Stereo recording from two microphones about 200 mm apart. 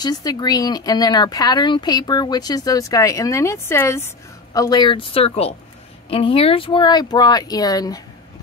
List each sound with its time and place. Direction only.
0.0 s speech: 20° left (ahead or behind)